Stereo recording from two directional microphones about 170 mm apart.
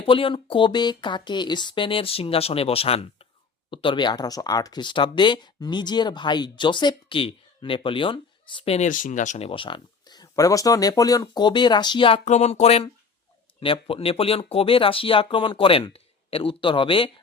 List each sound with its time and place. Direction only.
0.0 s speech: 30° left (ahead or behind)
9.5 s speech: 30° left (ahead or behind)